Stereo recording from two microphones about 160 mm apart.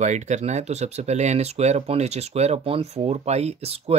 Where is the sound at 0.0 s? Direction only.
45° right (ahead or behind).